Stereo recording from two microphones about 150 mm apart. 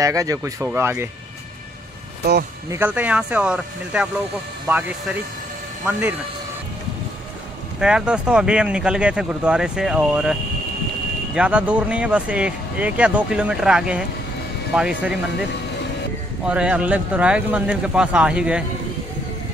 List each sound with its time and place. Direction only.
0.0 s speech: 20° right (ahead or behind)
2.7 s speech: 10° right (ahead or behind)
5.9 s speech: 10° right (ahead or behind)
7.8 s speech: 5° right (ahead or behind)
11.3 s speech: 10° right (ahead or behind)
16.4 s speech: 5° right (ahead or behind)